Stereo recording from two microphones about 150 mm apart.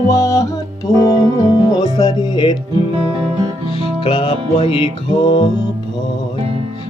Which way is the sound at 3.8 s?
35° left (ahead or behind).